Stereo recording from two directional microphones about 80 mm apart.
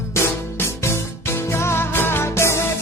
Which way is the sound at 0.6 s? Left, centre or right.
Left.